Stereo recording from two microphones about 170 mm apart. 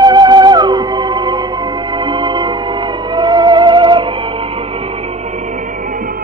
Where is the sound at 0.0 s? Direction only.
25° right (ahead or behind).